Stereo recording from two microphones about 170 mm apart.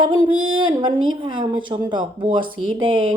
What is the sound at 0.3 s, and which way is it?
Speech, 25° right (ahead or behind).